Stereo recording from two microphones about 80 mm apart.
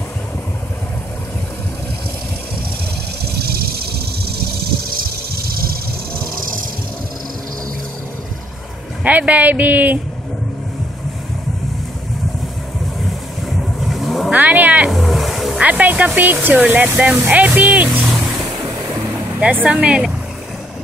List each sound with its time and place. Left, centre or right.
9.0 s speech: centre
13.7 s vehicle: centre
14.3 s a sound: right
14.9 s a sound: centre
15.6 s speech: centre
19.4 s speech: centre